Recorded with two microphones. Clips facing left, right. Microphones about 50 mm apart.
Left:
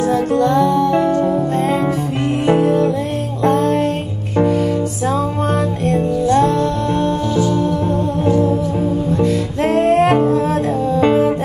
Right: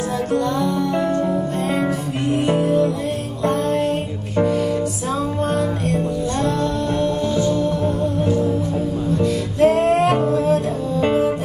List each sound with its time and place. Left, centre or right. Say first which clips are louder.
0.1 s music: left 5 dB; left
5.9 s music: left 6 dB; left
8.3 s music: left 4 dB; left